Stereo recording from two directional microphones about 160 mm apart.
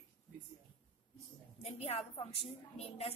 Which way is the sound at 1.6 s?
40° left (ahead or behind).